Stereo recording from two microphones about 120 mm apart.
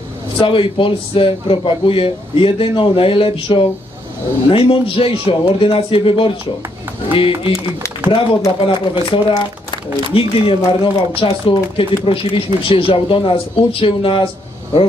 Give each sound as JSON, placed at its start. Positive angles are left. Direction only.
{"t": 0.4, "sound": "a man's voice", "side_deg": 45}